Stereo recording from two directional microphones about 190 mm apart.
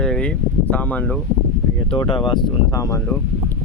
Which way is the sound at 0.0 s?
5° left (ahead or behind).